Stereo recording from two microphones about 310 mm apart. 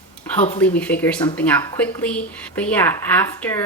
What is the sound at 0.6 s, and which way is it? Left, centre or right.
Speech, centre.